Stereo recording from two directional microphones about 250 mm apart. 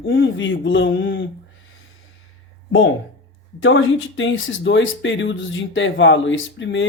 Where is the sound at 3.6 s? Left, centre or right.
Left.